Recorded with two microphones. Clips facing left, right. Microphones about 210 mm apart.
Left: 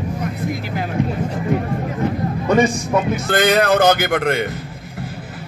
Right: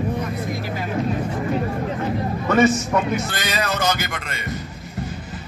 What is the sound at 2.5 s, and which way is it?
Speech, 15° left (ahead or behind).